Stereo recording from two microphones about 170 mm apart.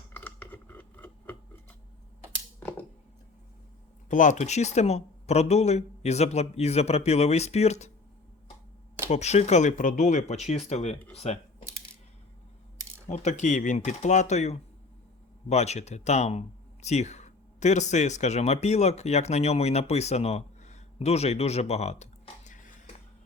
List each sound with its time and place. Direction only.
0.1 s a sound: 10° left (ahead or behind)
4.1 s speech: 50° left (ahead or behind)
9.0 s speech: 40° left (ahead or behind)
13.1 s speech: 45° left (ahead or behind)